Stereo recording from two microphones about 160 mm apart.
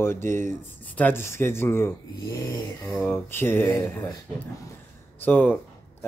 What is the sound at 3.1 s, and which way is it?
Speech, 15° left (ahead or behind).